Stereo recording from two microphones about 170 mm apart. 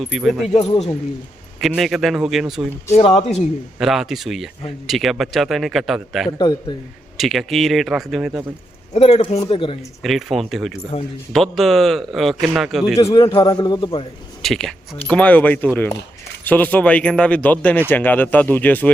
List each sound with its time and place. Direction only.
0.0 s speech: centre (ahead or behind)
1.6 s speech: centre (ahead or behind)
2.9 s a man's voice: 35° left (ahead or behind)
3.8 s speech: centre (ahead or behind)
8.9 s a man's voice: 35° left (ahead or behind)
10.0 s speech: centre (ahead or behind)
13.0 s a man's voice: 20° left (ahead or behind)
14.4 s speech: centre (ahead or behind)